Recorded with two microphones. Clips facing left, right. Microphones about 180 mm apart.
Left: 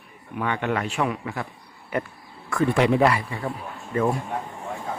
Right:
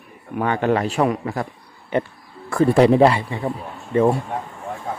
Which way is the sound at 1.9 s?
30° right (ahead or behind).